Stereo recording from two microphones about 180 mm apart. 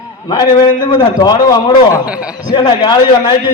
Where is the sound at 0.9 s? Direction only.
25° left (ahead or behind).